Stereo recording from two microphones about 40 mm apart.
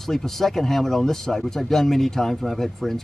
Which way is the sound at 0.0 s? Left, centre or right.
Centre.